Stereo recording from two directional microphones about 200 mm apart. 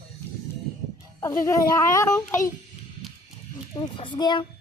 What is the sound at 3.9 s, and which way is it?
Speech, 25° left (ahead or behind).